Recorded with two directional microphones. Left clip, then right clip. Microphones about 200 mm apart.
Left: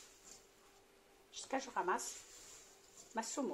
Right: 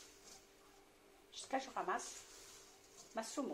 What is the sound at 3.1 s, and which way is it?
Speech, 45° left (ahead or behind).